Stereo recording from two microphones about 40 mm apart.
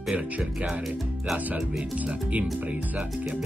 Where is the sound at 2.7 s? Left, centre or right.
Right.